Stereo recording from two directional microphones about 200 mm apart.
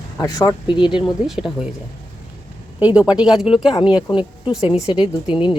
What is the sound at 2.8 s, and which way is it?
Speech, 5° right (ahead or behind).